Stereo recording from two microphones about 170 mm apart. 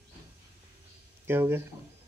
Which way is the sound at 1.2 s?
15° right (ahead or behind).